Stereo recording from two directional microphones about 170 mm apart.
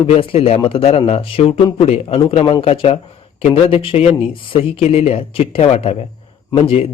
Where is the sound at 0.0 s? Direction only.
30° left (ahead or behind).